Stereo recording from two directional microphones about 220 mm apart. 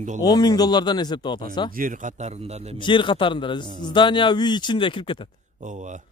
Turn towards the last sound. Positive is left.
turn(degrees=-35)  # may be behind; listen again after turning